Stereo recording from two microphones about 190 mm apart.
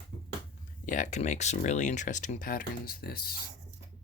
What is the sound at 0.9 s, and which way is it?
Speech, 40° left (ahead or behind).